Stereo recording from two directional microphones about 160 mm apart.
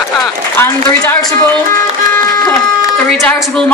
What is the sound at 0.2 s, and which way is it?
Speech, 15° left (ahead or behind).